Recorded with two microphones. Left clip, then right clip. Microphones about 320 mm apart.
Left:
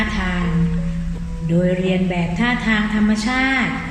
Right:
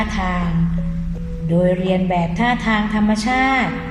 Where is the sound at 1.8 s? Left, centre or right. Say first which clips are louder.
Right 3 dB; centre.